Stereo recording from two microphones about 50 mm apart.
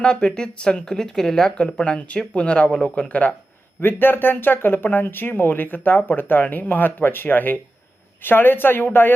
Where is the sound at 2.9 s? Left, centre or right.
Left.